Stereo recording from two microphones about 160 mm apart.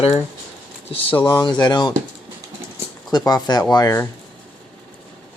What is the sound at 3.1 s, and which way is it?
Speech, 25° left (ahead or behind).